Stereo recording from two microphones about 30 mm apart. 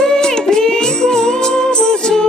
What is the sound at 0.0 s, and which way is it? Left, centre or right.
Music, left.